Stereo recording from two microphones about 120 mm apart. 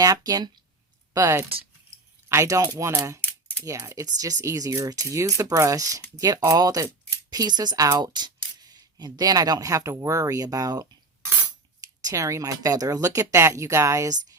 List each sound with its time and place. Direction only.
0.0 s speech: 30° right (ahead or behind)